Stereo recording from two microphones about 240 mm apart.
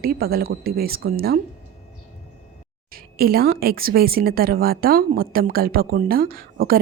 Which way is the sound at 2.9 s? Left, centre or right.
Right.